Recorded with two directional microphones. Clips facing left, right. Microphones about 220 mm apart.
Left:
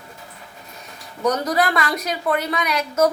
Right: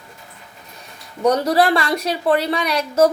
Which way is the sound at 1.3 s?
30° right (ahead or behind).